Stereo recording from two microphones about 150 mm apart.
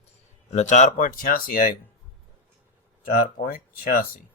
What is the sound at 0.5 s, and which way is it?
Speech, 50° left (ahead or behind).